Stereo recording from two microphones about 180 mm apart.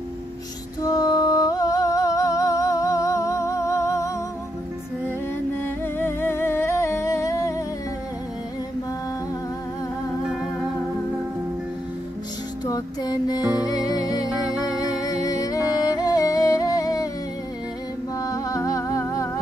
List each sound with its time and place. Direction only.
0.8 s music: 20° left (ahead or behind)
5.9 s humming: 15° left (ahead or behind)
12.6 s music: 20° left (ahead or behind)
18.2 s music: 20° left (ahead or behind)